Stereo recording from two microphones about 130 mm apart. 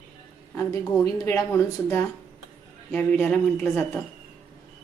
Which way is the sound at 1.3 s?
20° left (ahead or behind).